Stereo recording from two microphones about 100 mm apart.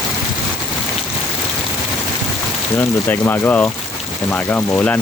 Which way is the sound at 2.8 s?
20° left (ahead or behind).